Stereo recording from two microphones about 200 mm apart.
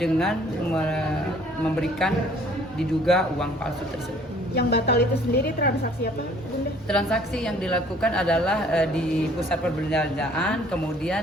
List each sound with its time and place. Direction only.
0.0 s a woman's voice: centre (ahead or behind)
4.5 s a woman's voice: 55° left (ahead or behind)
6.8 s a woman's voice: 5° left (ahead or behind)
9.9 s a woman's voice: 5° left (ahead or behind)